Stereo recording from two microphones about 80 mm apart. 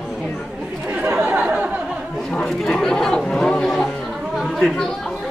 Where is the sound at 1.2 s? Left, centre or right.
Centre.